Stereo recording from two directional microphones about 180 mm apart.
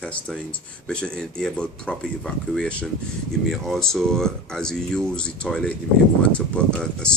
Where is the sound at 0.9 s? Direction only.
5° left (ahead or behind).